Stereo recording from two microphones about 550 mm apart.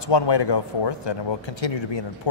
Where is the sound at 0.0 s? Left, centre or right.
Left.